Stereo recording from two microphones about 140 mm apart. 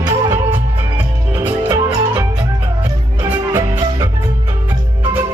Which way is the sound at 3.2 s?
15° right (ahead or behind).